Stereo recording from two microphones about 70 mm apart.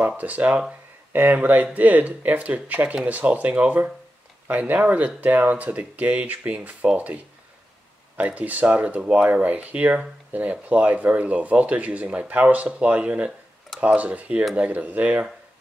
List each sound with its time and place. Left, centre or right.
0.2 s speech: right
8.2 s speech: right